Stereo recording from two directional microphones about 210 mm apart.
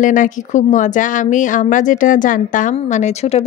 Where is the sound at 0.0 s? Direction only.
40° left (ahead or behind).